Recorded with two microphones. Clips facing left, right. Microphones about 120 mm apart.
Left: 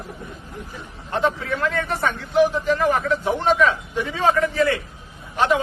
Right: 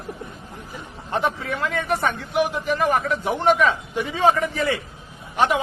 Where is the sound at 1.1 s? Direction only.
15° right (ahead or behind).